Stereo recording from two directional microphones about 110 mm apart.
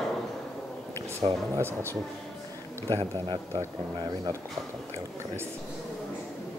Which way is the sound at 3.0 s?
45° right (ahead or behind).